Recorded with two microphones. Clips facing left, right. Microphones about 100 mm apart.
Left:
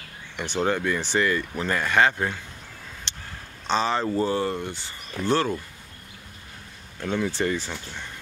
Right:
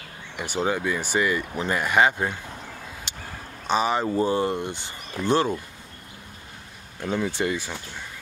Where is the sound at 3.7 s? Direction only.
15° right (ahead or behind).